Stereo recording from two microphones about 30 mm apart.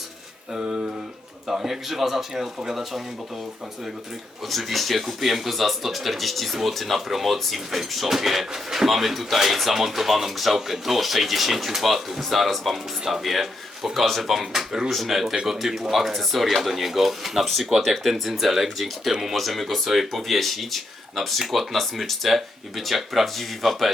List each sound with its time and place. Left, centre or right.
0.5 s a sound: right
1.5 s a man's voice: centre
4.4 s speech: centre
17.4 s speech: centre
18.1 s speech: centre